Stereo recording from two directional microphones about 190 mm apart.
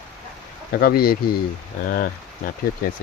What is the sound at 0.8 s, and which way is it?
Speech, 55° left (ahead or behind).